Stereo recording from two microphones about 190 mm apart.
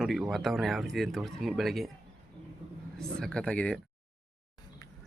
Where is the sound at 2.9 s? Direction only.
5° left (ahead or behind).